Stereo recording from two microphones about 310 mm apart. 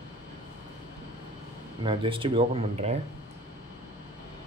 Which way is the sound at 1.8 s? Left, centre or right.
Centre.